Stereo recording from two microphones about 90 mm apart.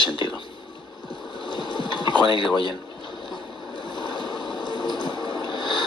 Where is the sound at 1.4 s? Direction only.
60° left (ahead or behind).